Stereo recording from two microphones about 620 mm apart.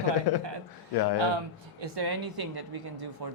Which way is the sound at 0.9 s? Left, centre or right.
Left.